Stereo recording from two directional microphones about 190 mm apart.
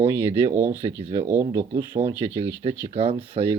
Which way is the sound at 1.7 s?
20° right (ahead or behind).